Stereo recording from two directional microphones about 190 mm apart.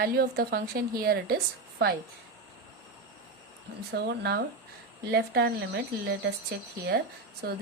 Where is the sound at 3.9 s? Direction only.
55° right (ahead or behind).